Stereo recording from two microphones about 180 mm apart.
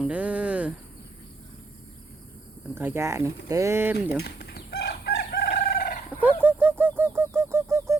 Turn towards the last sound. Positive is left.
turn(degrees=-15)  # may be behind; listen again after turning